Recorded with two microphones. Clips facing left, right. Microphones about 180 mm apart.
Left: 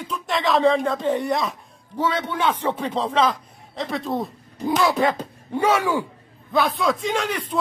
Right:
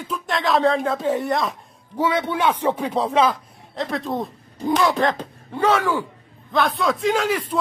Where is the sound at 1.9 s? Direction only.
10° right (ahead or behind).